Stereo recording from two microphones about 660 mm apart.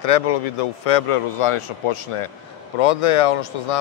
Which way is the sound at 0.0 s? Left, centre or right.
Left.